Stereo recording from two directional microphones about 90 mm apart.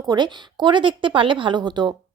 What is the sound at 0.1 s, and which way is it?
A woman's voice, 55° right (ahead or behind).